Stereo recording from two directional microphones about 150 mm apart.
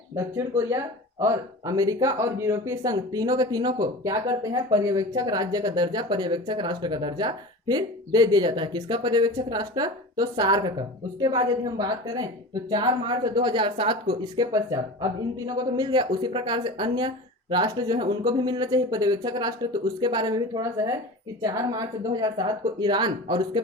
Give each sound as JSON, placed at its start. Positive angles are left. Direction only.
{"t": 0.2, "sound": "speech", "side_deg": -15}
{"t": 14.3, "sound": "speech", "side_deg": -25}